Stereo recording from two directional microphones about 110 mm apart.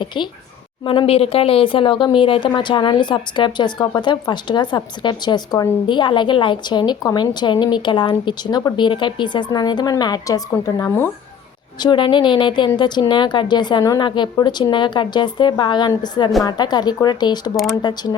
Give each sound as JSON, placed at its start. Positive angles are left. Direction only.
{"t": 0.0, "sound": "a woman's voice", "side_deg": 45}
{"t": 0.9, "sound": "a woman's voice", "side_deg": 55}
{"t": 10.5, "sound": "speech", "side_deg": 25}
{"t": 11.8, "sound": "a woman's voice", "side_deg": 45}